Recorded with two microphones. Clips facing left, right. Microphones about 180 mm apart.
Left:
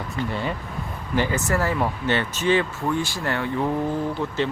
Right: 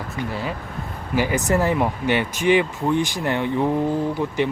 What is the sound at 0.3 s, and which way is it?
Speech, centre (ahead or behind).